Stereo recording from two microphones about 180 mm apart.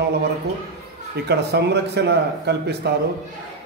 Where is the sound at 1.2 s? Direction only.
65° right (ahead or behind).